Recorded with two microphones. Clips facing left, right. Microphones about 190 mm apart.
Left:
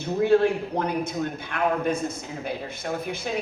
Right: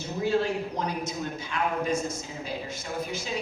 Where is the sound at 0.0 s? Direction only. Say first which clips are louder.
Left 7 dB; 60° left (ahead or behind).